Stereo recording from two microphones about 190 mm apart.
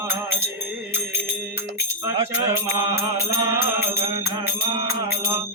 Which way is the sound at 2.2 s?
30° right (ahead or behind).